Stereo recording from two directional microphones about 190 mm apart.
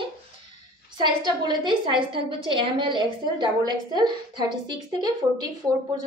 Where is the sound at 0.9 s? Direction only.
25° right (ahead or behind).